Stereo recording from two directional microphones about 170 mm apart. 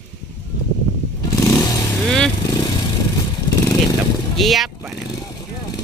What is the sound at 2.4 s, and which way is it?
Motorcycle, 20° left (ahead or behind).